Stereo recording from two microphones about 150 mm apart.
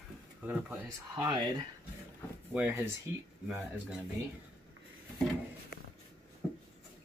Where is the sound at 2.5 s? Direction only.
10° right (ahead or behind).